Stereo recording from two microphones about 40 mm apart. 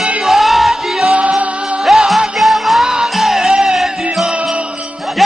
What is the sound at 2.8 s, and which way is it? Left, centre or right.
Music, centre.